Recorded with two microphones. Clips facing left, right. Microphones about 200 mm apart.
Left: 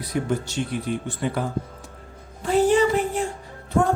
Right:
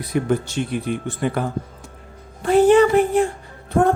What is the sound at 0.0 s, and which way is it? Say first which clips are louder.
Speech: right 4 dB; 55° right (ahead or behind).